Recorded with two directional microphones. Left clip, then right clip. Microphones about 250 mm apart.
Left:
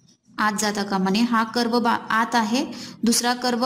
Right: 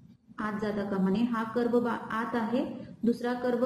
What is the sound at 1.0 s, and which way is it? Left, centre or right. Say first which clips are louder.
A woman's voice: left 11 dB; left.